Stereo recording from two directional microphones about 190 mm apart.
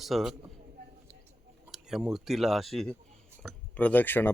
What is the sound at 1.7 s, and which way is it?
A man's voice, centre (ahead or behind).